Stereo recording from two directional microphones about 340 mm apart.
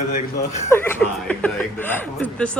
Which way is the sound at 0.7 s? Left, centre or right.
Centre.